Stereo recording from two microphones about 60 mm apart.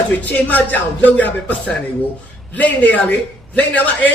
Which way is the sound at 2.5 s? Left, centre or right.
Left.